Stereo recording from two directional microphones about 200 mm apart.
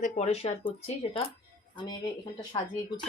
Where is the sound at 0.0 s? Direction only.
35° left (ahead or behind).